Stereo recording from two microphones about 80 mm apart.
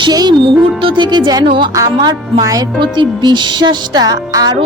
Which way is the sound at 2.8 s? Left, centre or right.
Right.